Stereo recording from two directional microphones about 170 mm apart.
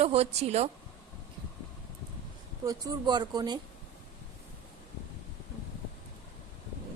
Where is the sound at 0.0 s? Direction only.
35° right (ahead or behind).